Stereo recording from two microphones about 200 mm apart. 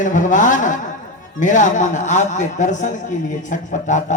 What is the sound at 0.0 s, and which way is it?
Speech, 40° left (ahead or behind).